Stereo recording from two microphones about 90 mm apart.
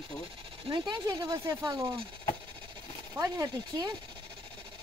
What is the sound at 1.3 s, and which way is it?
Speech, 40° right (ahead or behind).